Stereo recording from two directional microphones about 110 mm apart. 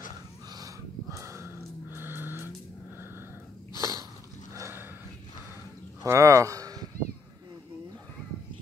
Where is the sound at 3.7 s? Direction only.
30° right (ahead or behind).